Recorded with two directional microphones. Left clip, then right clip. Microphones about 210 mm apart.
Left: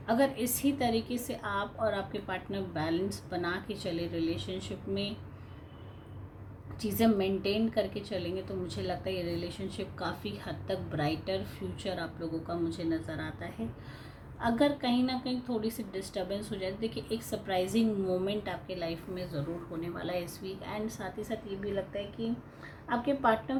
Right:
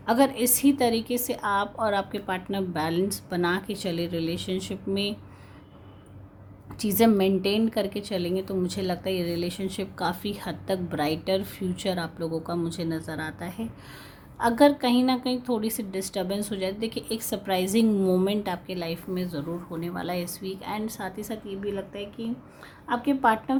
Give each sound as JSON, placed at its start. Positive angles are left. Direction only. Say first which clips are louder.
{"t": 0.0, "sound": "a woman's voice", "louder": "right 6 dB", "side_deg": -50}
{"t": 6.7, "sound": "a woman's voice", "louder": "right 7 dB", "side_deg": -45}